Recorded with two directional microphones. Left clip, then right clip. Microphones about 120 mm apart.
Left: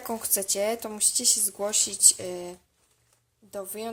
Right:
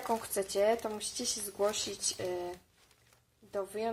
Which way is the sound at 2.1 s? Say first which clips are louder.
Left 2 dB; 25° left (ahead or behind).